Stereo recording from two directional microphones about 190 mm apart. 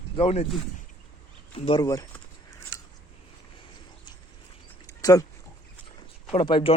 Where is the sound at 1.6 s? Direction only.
30° left (ahead or behind).